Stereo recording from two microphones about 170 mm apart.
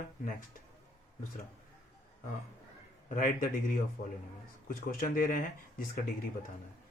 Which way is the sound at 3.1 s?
50° left (ahead or behind).